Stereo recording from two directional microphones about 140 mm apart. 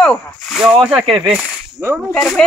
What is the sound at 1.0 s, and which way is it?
Speech, 35° right (ahead or behind).